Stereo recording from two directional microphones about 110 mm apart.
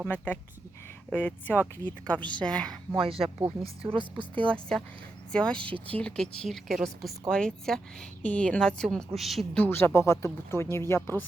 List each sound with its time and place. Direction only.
1.1 s a woman's voice: 15° left (ahead or behind)
2.9 s a woman's voice: 55° right (ahead or behind)
4.4 s a woman's voice: 10° left (ahead or behind)
9.6 s speech: 20° left (ahead or behind)